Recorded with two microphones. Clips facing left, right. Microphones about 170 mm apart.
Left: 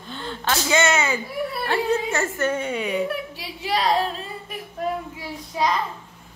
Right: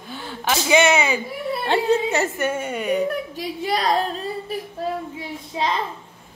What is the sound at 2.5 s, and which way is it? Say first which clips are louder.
Speech: right 1 dB; 5° right (ahead or behind).